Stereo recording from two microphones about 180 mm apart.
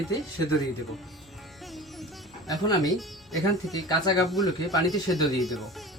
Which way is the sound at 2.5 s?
20° left (ahead or behind).